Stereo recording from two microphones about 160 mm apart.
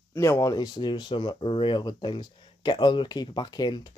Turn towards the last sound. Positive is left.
turn(degrees=25)  # may be behind; listen again after turning